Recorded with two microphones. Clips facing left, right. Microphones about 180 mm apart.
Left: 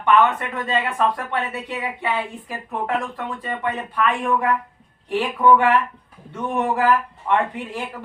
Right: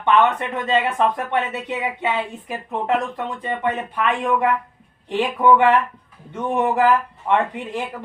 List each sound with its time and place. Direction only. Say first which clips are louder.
0.0 s speech: even; 20° right (ahead or behind)